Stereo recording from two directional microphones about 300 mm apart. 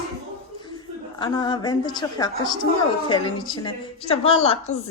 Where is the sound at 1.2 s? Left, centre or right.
Centre.